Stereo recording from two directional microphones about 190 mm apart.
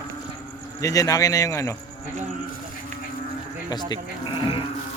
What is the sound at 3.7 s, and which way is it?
Sheep, 25° left (ahead or behind).